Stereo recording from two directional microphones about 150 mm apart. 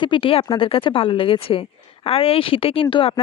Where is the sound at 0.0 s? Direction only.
35° left (ahead or behind).